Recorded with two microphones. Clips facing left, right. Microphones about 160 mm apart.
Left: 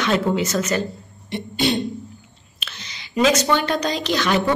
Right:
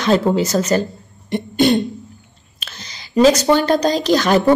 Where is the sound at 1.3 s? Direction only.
50° right (ahead or behind).